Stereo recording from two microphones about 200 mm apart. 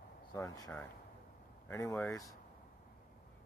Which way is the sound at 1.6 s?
10° left (ahead or behind).